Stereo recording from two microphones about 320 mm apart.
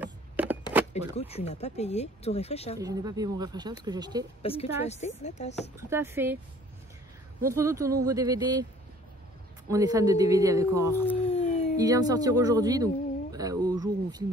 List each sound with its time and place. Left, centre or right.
0.0 s a sound: centre
0.9 s speech: centre
2.8 s speech: centre
4.4 s a woman's voice: centre
5.8 s speech: centre
7.4 s speech: centre
9.7 s speech: centre
11.2 s howl: centre
11.7 s speech: centre